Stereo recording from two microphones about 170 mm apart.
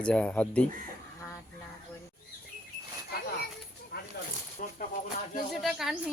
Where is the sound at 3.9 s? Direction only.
75° left (ahead or behind).